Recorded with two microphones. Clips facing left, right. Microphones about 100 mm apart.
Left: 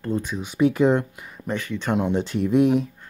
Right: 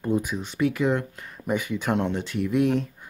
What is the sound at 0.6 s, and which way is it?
Speech, 30° left (ahead or behind).